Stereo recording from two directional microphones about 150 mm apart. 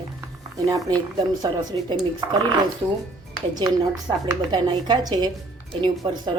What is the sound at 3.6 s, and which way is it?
A woman's voice, 30° right (ahead or behind).